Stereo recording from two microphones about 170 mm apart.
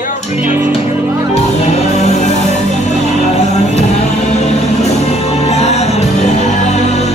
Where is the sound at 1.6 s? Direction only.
40° left (ahead or behind).